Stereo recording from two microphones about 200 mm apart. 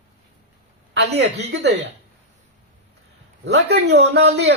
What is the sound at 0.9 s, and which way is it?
Speech, 55° right (ahead or behind).